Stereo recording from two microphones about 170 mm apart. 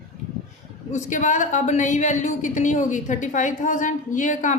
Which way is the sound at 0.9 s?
45° left (ahead or behind).